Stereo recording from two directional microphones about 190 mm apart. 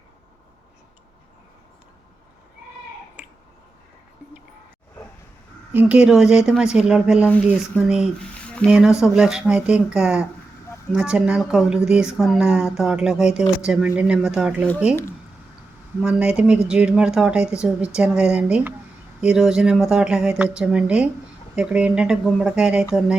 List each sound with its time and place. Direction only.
3.2 s clicking: 10° right (ahead or behind)
5.7 s speech: 5° right (ahead or behind)
16.0 s speech: 5° right (ahead or behind)